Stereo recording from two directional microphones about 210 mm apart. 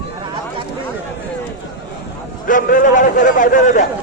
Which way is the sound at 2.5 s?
40° left (ahead or behind).